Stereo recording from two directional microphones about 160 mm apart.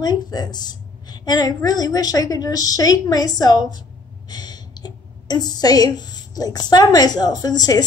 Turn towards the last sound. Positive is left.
turn(degrees=25)  # may be behind; listen again after turning